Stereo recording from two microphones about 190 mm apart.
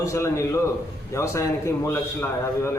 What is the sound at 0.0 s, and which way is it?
A man's voice, 15° left (ahead or behind).